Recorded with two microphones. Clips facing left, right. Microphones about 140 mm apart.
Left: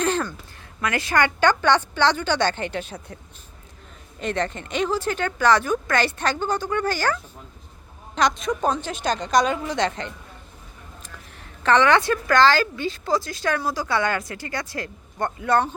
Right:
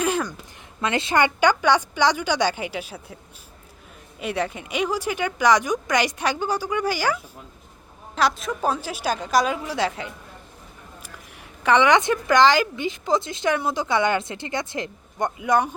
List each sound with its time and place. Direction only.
0.0 s a sound: 10° right (ahead or behind)
0.8 s speech: 25° right (ahead or behind); by 3.2 s 5° right (ahead or behind)
4.2 s a woman's voice: 10° right (ahead or behind)